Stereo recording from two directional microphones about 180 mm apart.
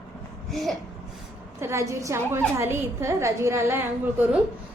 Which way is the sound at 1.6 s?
15° right (ahead or behind).